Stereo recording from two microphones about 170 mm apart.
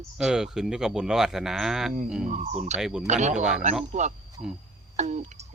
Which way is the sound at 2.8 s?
5° right (ahead or behind).